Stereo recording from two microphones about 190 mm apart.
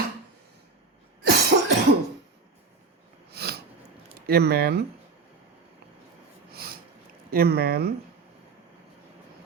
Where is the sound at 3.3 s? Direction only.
55° right (ahead or behind).